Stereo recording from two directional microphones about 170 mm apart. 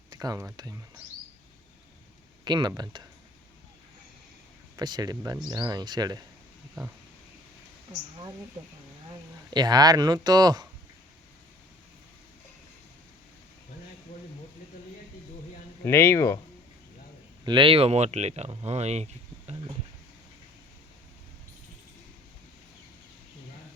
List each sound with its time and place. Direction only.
0.1 s speech: 20° right (ahead or behind)
2.4 s speech: 25° right (ahead or behind)
4.8 s speech: 25° right (ahead or behind)
9.5 s speech: 25° right (ahead or behind)
15.8 s speech: 15° left (ahead or behind)
17.4 s speech: 30° right (ahead or behind)